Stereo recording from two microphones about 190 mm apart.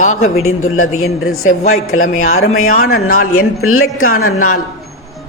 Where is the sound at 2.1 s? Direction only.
40° left (ahead or behind).